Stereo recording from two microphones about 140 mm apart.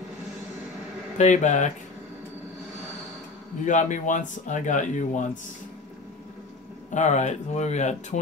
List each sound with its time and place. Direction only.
1.1 s speech: 55° left (ahead or behind)
3.6 s speech: 60° left (ahead or behind)
6.9 s speech: 60° left (ahead or behind)